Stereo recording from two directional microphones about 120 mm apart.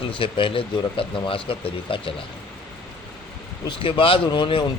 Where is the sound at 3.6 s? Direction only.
45° left (ahead or behind).